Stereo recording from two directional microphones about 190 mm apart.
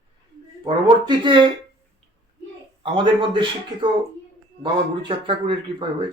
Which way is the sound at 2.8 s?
25° right (ahead or behind).